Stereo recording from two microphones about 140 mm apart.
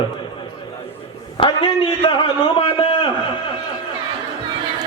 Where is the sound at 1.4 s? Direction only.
35° left (ahead or behind).